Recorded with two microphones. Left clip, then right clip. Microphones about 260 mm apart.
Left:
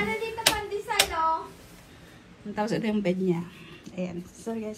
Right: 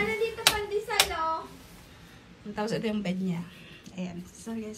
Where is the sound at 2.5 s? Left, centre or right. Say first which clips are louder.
Left 2 dB; centre.